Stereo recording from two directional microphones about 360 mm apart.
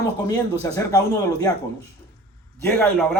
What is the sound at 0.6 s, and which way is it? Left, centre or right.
Speech, centre.